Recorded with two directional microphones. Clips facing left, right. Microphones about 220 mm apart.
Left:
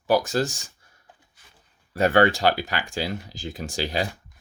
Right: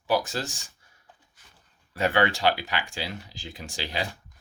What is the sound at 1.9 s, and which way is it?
Speech, 45° left (ahead or behind).